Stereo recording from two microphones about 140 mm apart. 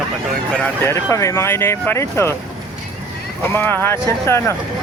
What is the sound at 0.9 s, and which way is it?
Speech, 20° left (ahead or behind).